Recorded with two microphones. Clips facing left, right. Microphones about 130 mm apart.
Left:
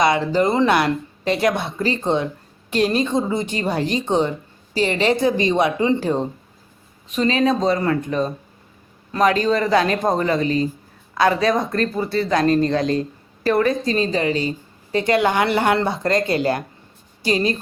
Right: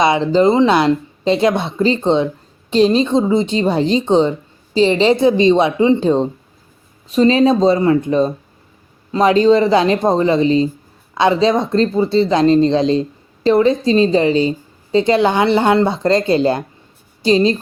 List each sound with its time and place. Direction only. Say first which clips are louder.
0.0 s speech: right 5 dB; 25° right (ahead or behind)